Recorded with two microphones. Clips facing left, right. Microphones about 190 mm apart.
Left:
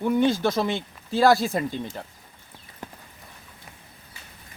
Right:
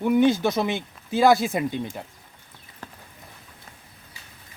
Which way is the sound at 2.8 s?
20° left (ahead or behind).